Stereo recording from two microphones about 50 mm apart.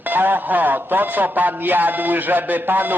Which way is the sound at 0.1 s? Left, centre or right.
Right.